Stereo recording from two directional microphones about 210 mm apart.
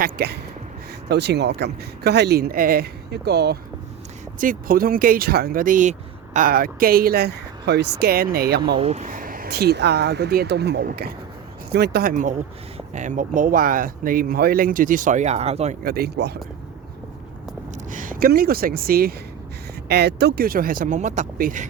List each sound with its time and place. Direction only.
0.0 s speech: 50° right (ahead or behind)
8.6 s speech: 25° right (ahead or behind)
15.8 s speech: 45° right (ahead or behind)
17.9 s speech: 40° right (ahead or behind)